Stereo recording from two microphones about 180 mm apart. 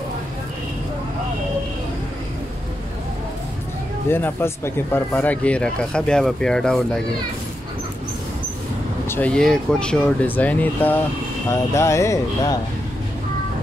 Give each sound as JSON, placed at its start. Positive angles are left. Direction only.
{"t": 4.1, "sound": "speech", "side_deg": 15}
{"t": 9.1, "sound": "speech", "side_deg": 5}